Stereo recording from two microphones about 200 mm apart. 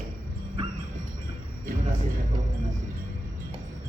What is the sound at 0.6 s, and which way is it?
Music, 30° right (ahead or behind).